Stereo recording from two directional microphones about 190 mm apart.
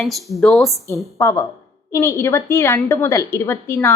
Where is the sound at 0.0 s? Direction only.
Centre (ahead or behind).